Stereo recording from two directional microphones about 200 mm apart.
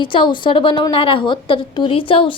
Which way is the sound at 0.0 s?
25° left (ahead or behind).